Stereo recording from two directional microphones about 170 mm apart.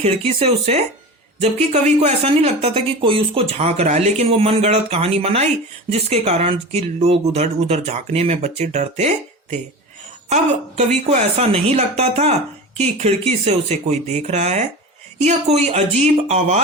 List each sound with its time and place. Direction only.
0.0 s a woman's voice: 35° right (ahead or behind)